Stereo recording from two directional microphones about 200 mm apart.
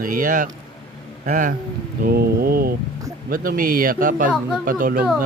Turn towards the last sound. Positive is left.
turn(degrees=-45)  # may be behind; listen again after turning